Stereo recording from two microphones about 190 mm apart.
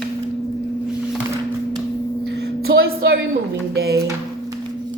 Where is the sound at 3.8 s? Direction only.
55° right (ahead or behind).